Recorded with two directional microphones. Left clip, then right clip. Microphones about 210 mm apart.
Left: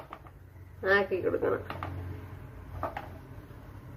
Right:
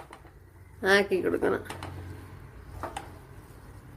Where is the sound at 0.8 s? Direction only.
50° right (ahead or behind).